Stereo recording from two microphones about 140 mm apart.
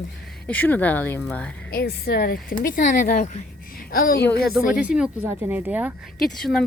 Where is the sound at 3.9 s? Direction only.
90° left.